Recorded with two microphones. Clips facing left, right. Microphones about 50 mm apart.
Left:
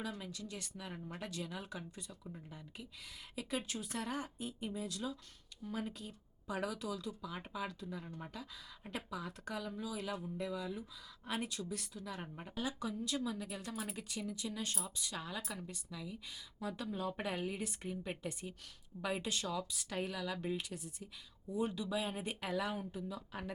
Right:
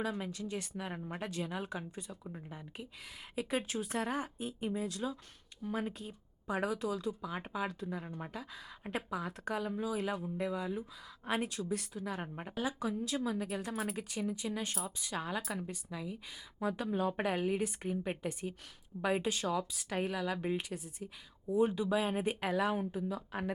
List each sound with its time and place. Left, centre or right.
0.0 s speech: right